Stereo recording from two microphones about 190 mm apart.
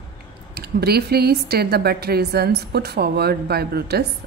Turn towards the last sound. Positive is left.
turn(degrees=-55)  # may be behind; listen again after turning